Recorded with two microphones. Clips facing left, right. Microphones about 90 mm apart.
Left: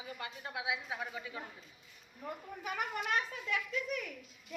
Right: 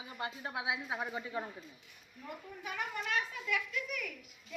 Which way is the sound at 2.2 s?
35° left (ahead or behind).